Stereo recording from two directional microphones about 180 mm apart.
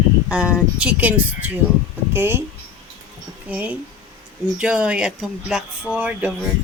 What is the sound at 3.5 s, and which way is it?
Speech, 10° right (ahead or behind).